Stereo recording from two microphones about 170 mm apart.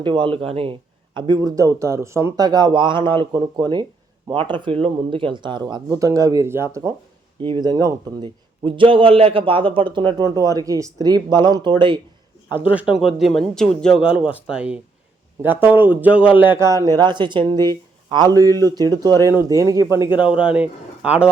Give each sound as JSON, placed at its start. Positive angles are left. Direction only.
{"t": 0.0, "sound": "a man's voice", "side_deg": -30}
{"t": 12.5, "sound": "a man's voice", "side_deg": -10}